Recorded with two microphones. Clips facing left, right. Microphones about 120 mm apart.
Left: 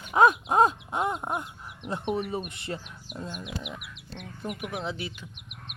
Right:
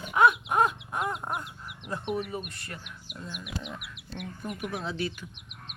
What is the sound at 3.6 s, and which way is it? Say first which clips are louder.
Speech: even; 10° left (ahead or behind).